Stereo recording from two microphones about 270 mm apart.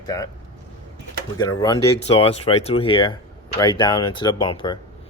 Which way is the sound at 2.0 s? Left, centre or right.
Left.